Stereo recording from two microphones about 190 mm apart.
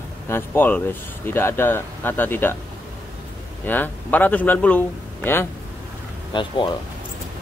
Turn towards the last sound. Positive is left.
turn(degrees=25)  # may be behind; listen again after turning